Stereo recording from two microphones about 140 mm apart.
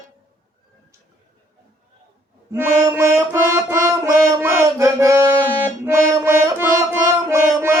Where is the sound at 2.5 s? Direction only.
20° right (ahead or behind).